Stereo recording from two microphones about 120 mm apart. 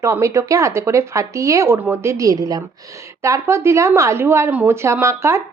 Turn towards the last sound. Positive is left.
turn(degrees=-20)  # may be behind; listen again after turning